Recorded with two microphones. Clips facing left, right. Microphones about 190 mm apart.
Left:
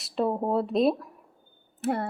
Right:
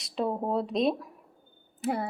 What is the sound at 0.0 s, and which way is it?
Speech, 5° left (ahead or behind).